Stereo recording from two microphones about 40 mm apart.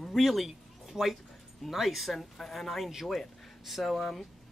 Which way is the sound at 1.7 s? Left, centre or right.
Centre.